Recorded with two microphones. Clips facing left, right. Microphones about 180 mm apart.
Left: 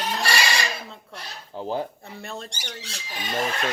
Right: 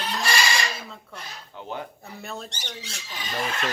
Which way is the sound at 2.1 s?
Centre (ahead or behind).